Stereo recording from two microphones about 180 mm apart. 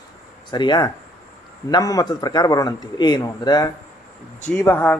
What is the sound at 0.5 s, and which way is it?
A man's voice, 25° left (ahead or behind).